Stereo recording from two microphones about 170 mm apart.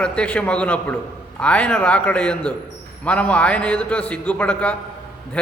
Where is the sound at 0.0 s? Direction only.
5° left (ahead or behind).